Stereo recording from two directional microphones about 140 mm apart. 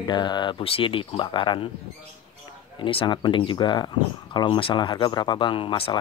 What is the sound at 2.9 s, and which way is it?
Speech, 35° left (ahead or behind).